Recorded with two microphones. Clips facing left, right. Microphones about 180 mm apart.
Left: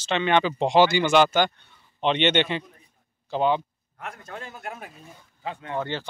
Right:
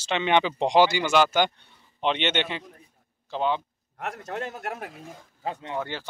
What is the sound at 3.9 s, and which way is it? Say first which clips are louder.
A man's voice: right 5 dB; 70° right (ahead or behind).